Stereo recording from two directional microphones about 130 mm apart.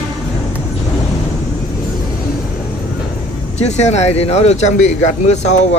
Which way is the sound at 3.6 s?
60° left (ahead or behind).